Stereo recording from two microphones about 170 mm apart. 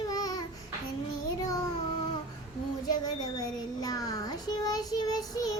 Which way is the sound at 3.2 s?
20° left (ahead or behind).